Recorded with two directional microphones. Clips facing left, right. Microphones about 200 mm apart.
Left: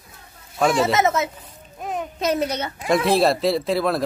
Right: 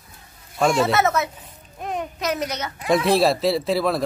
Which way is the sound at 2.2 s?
30° left (ahead or behind).